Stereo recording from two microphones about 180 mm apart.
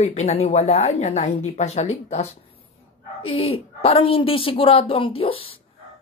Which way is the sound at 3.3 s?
35° left (ahead or behind).